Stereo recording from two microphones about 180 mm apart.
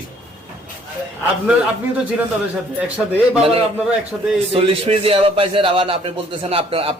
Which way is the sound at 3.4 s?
35° right (ahead or behind).